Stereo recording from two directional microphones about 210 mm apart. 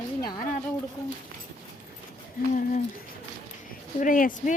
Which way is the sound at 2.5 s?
35° left (ahead or behind).